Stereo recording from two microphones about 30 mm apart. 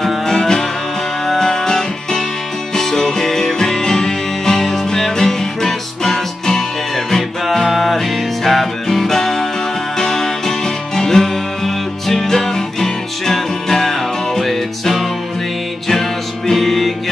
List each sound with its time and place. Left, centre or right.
0.3 s music: centre
7.4 s music: centre
8.8 s music: centre